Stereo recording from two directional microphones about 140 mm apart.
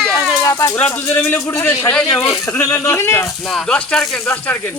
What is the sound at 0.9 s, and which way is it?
Speech, 20° left (ahead or behind).